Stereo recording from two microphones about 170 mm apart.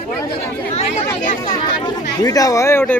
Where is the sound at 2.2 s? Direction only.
20° left (ahead or behind).